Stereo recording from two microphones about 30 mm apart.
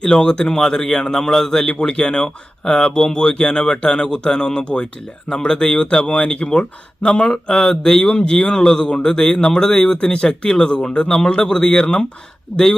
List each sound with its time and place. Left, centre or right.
0.0 s speech: left
1.8 s speech: left
7.5 s speech: centre
8.0 s speech: left